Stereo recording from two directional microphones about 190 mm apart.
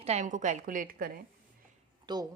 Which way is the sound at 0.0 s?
35° right (ahead or behind).